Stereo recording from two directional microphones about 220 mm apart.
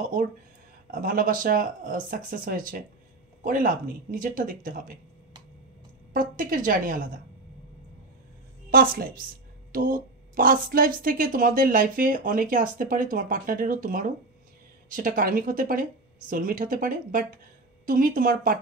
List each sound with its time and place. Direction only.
1.0 s a woman's voice: 40° right (ahead or behind)
6.1 s a woman's voice: 40° right (ahead or behind)
8.6 s a woman's voice: 40° right (ahead or behind)